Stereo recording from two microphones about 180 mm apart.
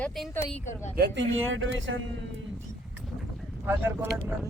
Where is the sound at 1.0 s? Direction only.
90° right.